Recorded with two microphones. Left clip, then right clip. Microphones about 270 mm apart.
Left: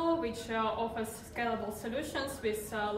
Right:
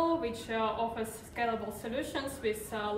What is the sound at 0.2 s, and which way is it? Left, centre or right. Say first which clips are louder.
A woman's voice: right 1 dB; centre.